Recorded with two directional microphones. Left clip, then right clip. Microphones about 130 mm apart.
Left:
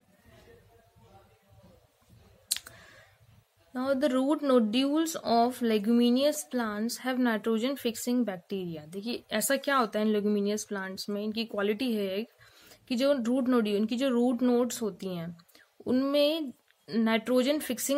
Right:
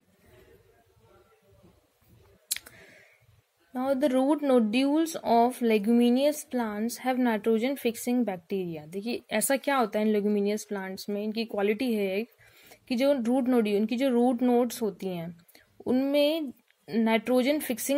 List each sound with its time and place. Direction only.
3.7 s speech: 20° right (ahead or behind)